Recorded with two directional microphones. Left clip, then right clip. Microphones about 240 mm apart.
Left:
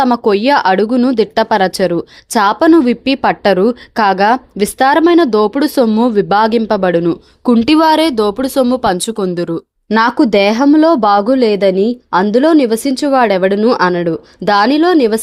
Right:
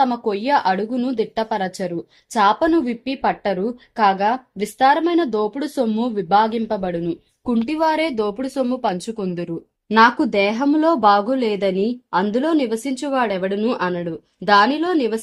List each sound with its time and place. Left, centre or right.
0.0 s speech: left